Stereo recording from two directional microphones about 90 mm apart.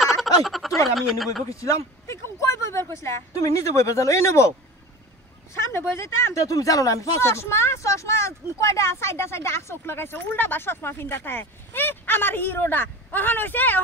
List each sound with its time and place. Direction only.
0.0 s a sound: centre (ahead or behind)
0.9 s speech: centre (ahead or behind)
1.5 s speech: 35° left (ahead or behind)
5.5 s speech: 30° left (ahead or behind)